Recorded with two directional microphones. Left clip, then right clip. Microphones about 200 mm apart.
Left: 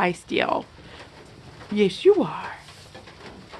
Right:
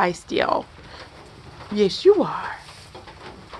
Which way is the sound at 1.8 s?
35° left (ahead or behind).